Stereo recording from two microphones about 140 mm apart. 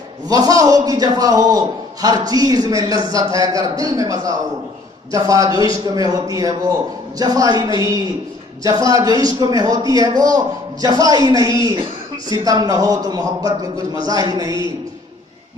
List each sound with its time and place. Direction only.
0.3 s a man's voice: 25° right (ahead or behind)
8.6 s a man's voice: 25° right (ahead or behind)